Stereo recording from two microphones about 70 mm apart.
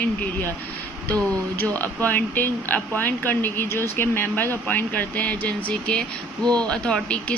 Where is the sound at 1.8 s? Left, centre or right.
Left.